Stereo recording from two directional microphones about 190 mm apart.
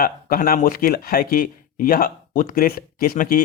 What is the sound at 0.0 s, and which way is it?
Speech, 50° left (ahead or behind).